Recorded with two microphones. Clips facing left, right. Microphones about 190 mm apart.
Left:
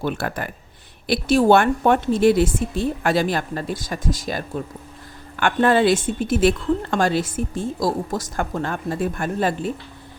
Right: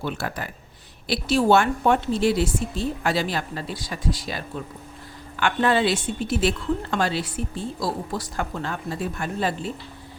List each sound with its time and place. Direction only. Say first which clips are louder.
0.0 s speech: left 4 dB; 55° left (ahead or behind)